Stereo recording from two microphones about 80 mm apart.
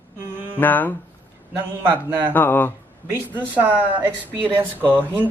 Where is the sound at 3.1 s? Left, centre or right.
Right.